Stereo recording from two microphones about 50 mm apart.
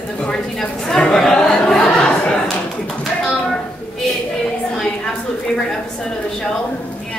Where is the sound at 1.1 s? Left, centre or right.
Centre.